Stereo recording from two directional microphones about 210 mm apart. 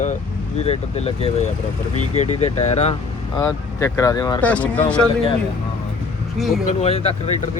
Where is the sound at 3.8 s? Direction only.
15° left (ahead or behind).